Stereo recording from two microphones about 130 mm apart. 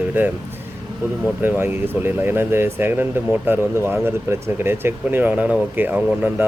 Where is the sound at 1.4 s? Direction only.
15° right (ahead or behind).